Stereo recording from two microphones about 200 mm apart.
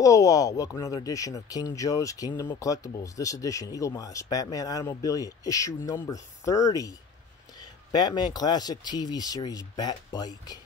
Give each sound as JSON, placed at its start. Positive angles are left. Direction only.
{"t": 0.0, "sound": "speech", "side_deg": 15}